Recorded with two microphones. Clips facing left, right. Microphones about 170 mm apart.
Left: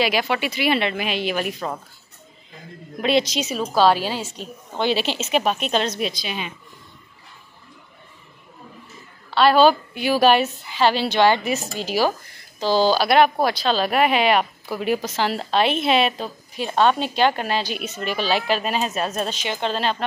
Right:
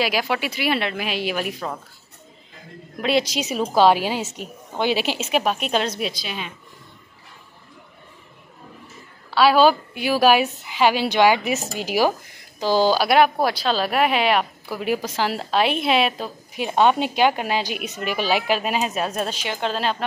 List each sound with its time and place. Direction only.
0.0 s speech: 5° right (ahead or behind)
3.0 s speech: 5° right (ahead or behind)
3.4 s a woman's voice: 15° right (ahead or behind); by 6.5 s centre (ahead or behind)
9.3 s a woman's voice: 5° right (ahead or behind)
16.5 s a woman's voice: 15° right (ahead or behind)